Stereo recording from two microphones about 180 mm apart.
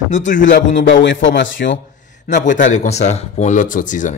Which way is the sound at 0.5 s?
85° left.